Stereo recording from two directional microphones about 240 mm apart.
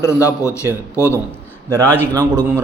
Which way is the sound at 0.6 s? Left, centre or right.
Centre.